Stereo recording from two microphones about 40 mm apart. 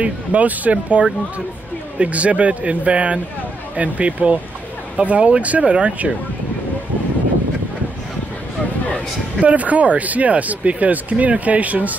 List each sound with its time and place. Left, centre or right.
0.0 s speech: right
9.4 s speech: right